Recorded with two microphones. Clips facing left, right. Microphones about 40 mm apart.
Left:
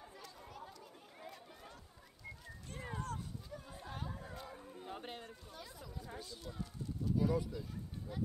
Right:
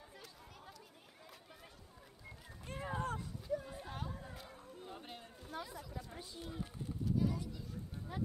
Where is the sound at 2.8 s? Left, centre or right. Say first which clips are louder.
Right 4 dB; centre.